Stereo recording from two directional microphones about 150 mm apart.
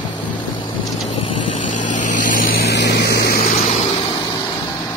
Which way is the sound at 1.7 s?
55° left (ahead or behind).